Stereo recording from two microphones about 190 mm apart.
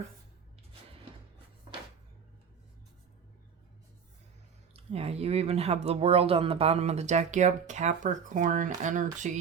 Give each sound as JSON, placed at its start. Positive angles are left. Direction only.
{"t": 4.7, "sound": "speech", "side_deg": -30}